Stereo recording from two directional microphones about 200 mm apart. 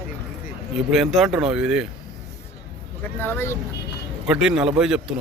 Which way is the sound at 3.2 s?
10° left (ahead or behind).